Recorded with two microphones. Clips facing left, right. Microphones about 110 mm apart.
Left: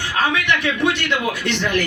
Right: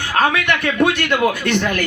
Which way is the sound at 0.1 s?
50° right (ahead or behind).